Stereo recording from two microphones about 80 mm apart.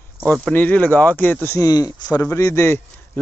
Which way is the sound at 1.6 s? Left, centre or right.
Left.